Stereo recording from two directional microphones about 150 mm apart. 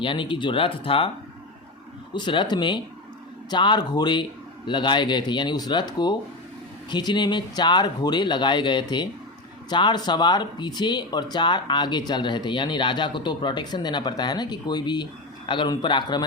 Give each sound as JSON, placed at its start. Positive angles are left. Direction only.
{"t": 0.0, "sound": "speech", "side_deg": 35}
{"t": 2.1, "sound": "speech", "side_deg": 35}